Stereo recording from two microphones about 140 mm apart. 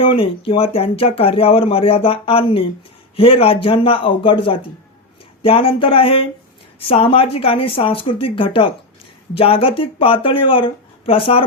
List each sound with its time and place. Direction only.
0.0 s speech: 40° left (ahead or behind)